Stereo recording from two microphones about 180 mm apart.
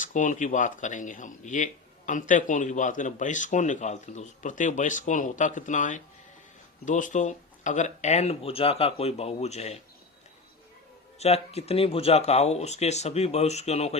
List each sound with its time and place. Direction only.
0.0 s speech: 45° left (ahead or behind)
11.2 s speech: 35° left (ahead or behind)